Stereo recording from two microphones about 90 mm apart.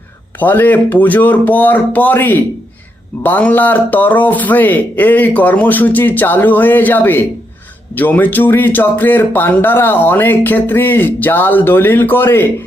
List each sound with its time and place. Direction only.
0.3 s speech: 20° left (ahead or behind)